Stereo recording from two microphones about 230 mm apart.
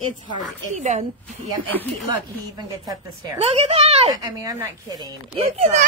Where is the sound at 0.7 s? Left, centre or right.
Right.